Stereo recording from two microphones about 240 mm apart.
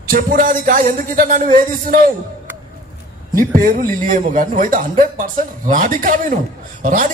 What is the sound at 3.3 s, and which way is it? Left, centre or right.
A man's voice, right.